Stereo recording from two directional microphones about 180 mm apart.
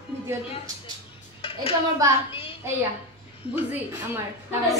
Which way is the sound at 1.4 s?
30° left (ahead or behind).